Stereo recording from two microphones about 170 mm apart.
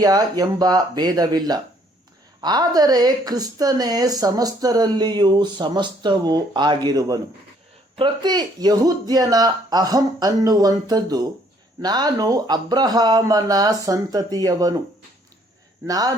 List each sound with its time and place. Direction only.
0.0 s a woman's voice: 20° right (ahead or behind)
15.9 s a woman's voice: 20° right (ahead or behind)